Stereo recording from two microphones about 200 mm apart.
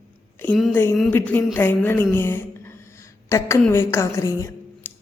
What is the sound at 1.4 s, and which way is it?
A woman's voice, 10° left (ahead or behind).